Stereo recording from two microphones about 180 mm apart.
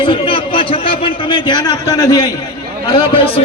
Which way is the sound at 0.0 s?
30° left (ahead or behind).